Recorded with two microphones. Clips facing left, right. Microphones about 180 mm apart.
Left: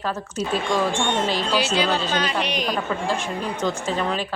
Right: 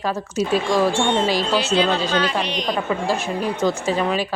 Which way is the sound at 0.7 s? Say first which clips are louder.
Right 3 dB; 30° right (ahead or behind).